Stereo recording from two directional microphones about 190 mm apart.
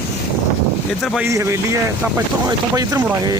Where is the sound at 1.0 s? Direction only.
Centre (ahead or behind).